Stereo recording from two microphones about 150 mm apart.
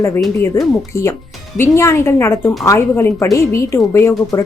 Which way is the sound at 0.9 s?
20° left (ahead or behind).